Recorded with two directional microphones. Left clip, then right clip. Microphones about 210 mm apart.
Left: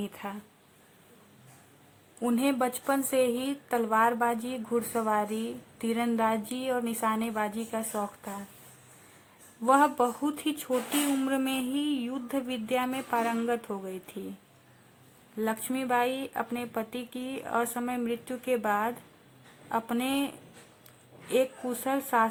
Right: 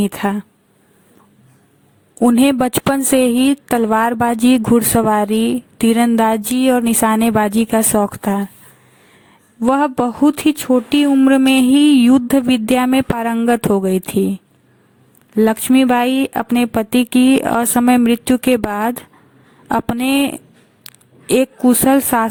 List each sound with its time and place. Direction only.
0.0 s a woman's voice: 45° right (ahead or behind)
2.2 s a woman's voice: 45° right (ahead or behind)
9.6 s a woman's voice: 40° right (ahead or behind)
15.4 s a woman's voice: 45° right (ahead or behind)